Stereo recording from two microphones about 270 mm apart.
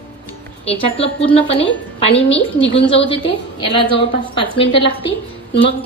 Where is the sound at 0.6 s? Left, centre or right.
Left.